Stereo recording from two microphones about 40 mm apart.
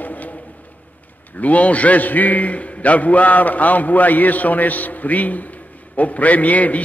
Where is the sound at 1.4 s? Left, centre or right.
Left.